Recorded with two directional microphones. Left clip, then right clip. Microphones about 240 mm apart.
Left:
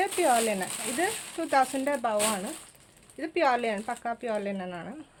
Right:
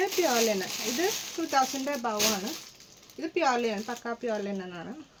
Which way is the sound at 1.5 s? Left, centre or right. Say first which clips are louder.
Left 2 dB; left.